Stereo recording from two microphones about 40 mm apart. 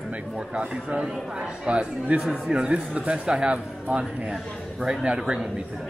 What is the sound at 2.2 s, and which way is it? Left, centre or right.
Speech, centre.